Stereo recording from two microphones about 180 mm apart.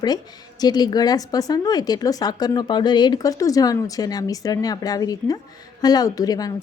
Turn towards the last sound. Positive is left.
turn(degrees=20)  # may be behind; listen again after turning